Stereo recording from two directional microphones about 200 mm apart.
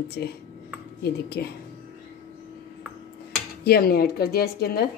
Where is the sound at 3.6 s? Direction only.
50° left (ahead or behind).